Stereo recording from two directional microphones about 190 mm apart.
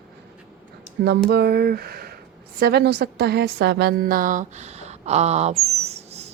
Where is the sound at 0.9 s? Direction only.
60° right (ahead or behind).